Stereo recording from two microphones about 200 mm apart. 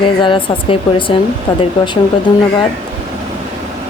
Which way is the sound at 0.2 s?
25° left (ahead or behind).